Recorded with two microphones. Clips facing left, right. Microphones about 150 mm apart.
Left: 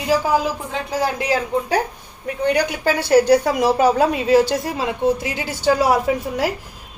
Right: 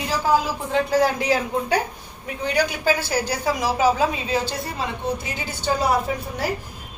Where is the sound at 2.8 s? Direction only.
65° left (ahead or behind); by 5.9 s 90° left.